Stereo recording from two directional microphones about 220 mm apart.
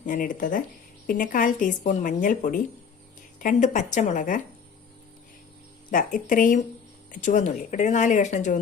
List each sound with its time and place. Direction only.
0.0 s speech: 35° left (ahead or behind)
5.9 s speech: 40° left (ahead or behind)